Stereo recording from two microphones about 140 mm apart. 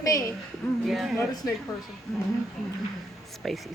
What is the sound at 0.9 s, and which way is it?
Speech, centre (ahead or behind).